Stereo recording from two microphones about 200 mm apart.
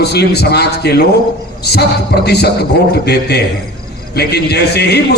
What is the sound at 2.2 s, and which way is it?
A man's voice, 55° left (ahead or behind).